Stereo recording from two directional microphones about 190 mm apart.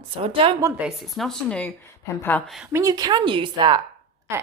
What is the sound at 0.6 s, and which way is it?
A woman's voice, 5° right (ahead or behind).